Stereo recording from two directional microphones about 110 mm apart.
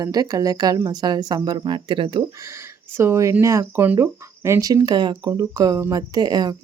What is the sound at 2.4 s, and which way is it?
Speech, 25° right (ahead or behind).